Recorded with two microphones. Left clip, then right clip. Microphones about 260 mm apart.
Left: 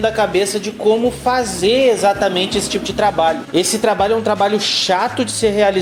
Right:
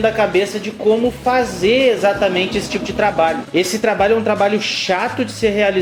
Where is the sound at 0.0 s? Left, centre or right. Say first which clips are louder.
Even; left.